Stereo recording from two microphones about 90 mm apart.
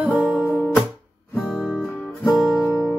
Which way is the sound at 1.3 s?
Centre (ahead or behind).